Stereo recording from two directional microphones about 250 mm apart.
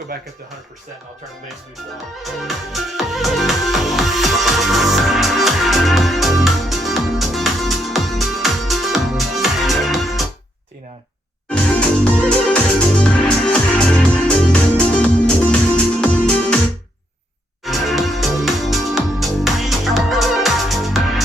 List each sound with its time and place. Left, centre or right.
0.1 s speech: right
2.2 s music: centre
11.4 s music: centre
17.6 s music: centre